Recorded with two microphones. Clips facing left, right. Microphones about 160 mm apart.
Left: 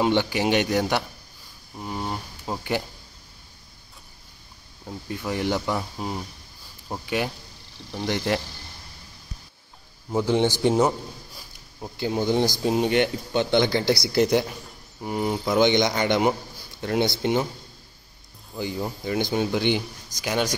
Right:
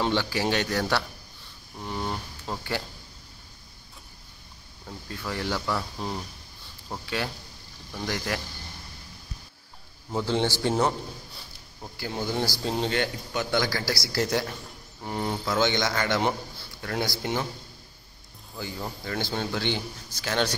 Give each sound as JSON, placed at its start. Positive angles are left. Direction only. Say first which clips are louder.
{"t": 0.0, "sound": "a man's voice", "louder": "left 4 dB", "side_deg": 20}
{"t": 4.8, "sound": "speech", "louder": "left 5 dB", "side_deg": 20}
{"t": 5.9, "sound": "a man's voice", "louder": "left 2 dB", "side_deg": 10}
{"t": 10.1, "sound": "a man's voice", "louder": "left 4 dB", "side_deg": 15}
{"t": 18.6, "sound": "a man's voice", "louder": "left 6 dB", "side_deg": 15}